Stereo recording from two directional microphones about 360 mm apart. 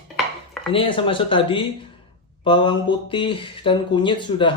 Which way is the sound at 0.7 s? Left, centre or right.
Centre.